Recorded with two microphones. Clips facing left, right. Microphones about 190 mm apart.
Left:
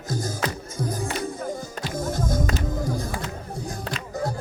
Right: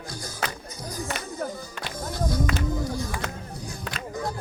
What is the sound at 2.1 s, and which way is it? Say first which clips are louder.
Music: right 1 dB; 45° left (ahead or behind).